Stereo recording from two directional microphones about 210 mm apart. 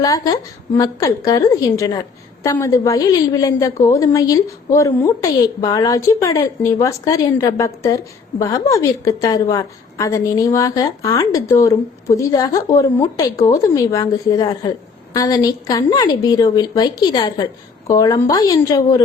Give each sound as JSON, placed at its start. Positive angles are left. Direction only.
{"t": 0.0, "sound": "a woman's voice", "side_deg": 15}